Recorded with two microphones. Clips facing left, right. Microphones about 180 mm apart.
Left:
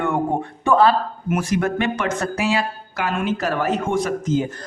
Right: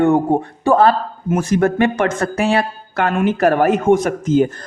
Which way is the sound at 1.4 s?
50° right (ahead or behind).